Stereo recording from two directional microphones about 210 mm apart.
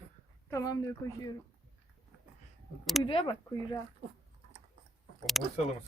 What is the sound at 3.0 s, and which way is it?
Speech, 20° left (ahead or behind).